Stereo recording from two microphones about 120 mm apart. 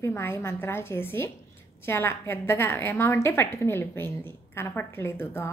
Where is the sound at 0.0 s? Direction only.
20° left (ahead or behind).